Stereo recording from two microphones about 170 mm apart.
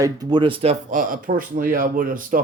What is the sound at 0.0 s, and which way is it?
Speech, 25° right (ahead or behind).